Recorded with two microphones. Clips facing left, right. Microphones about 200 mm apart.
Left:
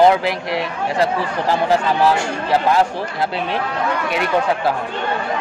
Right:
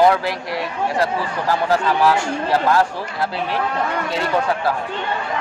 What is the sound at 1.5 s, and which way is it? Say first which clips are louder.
Speech: left 1 dB; 20° left (ahead or behind).